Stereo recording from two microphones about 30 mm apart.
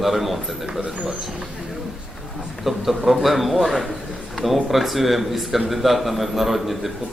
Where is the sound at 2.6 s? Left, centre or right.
Centre.